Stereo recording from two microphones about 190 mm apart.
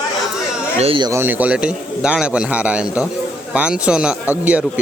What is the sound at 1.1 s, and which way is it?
A man's voice, 10° right (ahead or behind).